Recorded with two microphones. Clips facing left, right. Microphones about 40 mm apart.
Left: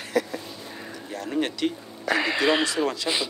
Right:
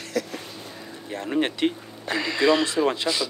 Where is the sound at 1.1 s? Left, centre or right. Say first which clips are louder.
Right 2 dB; right.